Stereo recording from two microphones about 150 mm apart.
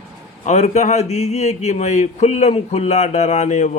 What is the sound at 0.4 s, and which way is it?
Speech, 50° left (ahead or behind).